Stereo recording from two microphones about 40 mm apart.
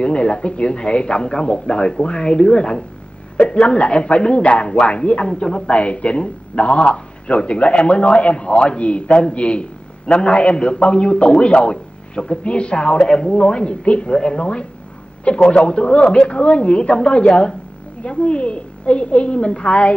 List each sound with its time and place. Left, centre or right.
0.0 s a man's voice: left
13.0 s speech: centre
13.3 s a man's voice: left